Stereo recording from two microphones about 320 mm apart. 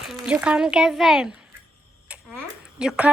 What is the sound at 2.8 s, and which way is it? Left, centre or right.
Speech, centre.